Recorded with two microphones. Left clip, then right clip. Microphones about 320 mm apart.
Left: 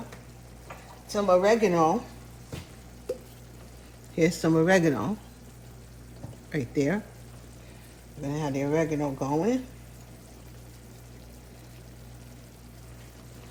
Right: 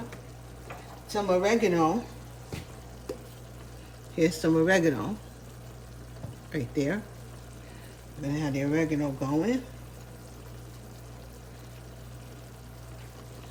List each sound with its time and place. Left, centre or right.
1.0 s speech: centre
4.1 s speech: centre
6.5 s speech: centre
8.2 s speech: centre